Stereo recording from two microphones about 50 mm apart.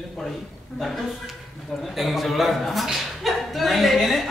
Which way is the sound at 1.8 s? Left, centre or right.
Centre.